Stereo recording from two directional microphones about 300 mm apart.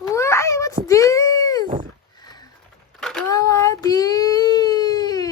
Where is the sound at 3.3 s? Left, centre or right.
Centre.